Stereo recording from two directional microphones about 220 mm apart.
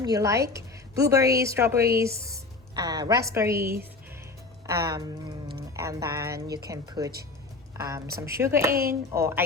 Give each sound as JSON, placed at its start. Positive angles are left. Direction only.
{"t": 0.0, "sound": "a woman's voice", "side_deg": -15}
{"t": 8.7, "sound": "a woman's voice", "side_deg": -40}
{"t": 9.1, "sound": "a woman's voice", "side_deg": -10}